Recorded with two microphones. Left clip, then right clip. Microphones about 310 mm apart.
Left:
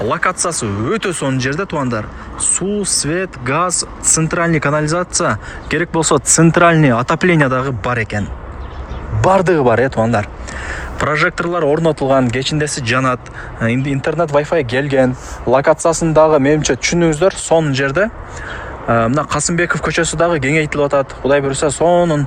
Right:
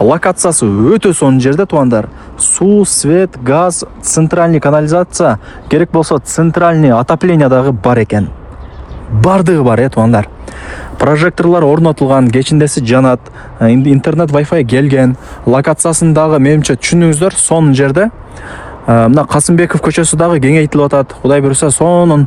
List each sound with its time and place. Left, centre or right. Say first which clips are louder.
0.1 s speech: right 6 dB; centre
9.2 s speech: right 2 dB; right